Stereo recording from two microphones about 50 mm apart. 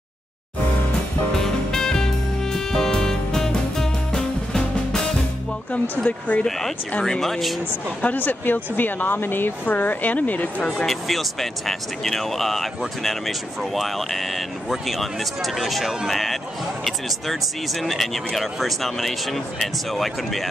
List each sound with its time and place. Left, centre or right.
1.3 s music: centre
5.7 s speech: left
7.1 s speech: centre
8.0 s speech: left
10.9 s speech: centre